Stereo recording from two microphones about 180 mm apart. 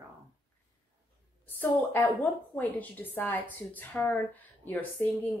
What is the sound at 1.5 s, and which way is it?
Speech, 10° left (ahead or behind).